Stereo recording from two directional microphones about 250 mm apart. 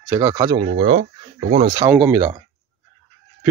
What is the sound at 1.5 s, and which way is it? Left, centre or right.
Speech, right.